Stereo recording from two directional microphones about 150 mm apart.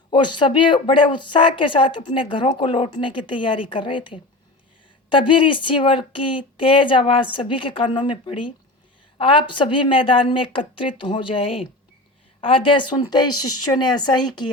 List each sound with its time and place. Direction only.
0.1 s a woman's voice: 30° left (ahead or behind)